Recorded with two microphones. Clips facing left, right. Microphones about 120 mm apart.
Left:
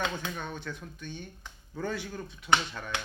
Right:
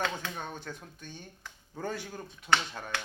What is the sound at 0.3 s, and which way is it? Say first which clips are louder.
Speech: left 2 dB; 40° right (ahead or behind).